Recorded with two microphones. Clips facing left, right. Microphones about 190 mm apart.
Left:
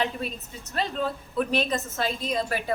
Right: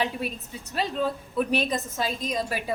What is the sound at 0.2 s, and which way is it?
Speech, 10° right (ahead or behind).